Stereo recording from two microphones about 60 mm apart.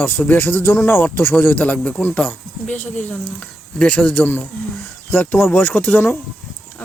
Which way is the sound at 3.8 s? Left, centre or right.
Centre.